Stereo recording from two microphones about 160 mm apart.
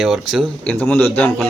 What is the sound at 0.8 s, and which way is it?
Speech, 10° left (ahead or behind).